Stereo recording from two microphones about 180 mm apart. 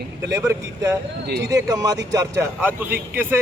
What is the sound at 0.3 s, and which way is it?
A man's voice, 20° right (ahead or behind).